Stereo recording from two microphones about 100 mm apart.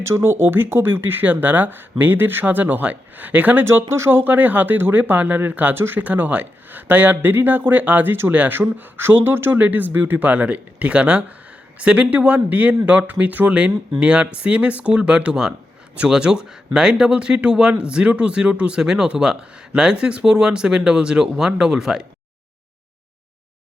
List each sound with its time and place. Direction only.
0.0 s speech: 25° right (ahead or behind); by 22.0 s 5° right (ahead or behind)